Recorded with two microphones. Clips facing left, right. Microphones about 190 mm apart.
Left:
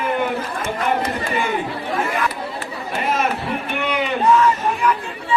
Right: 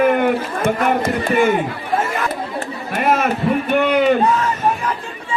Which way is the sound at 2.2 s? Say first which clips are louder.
Right 2 dB; 50° right (ahead or behind).